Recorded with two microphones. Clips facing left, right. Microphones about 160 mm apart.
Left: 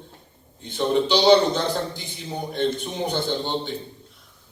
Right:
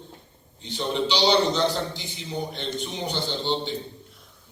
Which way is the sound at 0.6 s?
50° left (ahead or behind).